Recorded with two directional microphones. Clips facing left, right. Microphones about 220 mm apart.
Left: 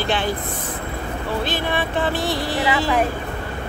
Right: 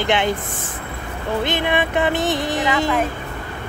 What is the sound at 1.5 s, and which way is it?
Speech, 20° right (ahead or behind).